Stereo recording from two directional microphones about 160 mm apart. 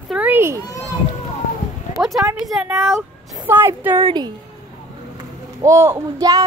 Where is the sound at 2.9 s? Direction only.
15° right (ahead or behind).